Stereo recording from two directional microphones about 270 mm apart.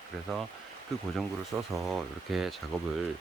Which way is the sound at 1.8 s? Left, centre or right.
Centre.